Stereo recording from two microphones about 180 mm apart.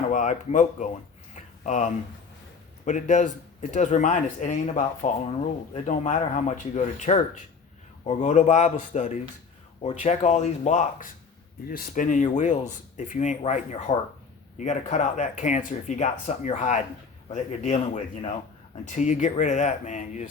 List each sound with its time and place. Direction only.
0.1 s speech: 45° left (ahead or behind)
1.4 s a sound: 40° left (ahead or behind)
2.8 s speech: 40° left (ahead or behind)